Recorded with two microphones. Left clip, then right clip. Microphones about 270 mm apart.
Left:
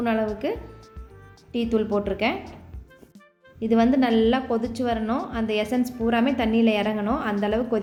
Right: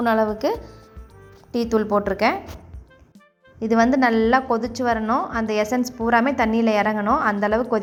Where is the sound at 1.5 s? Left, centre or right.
Centre.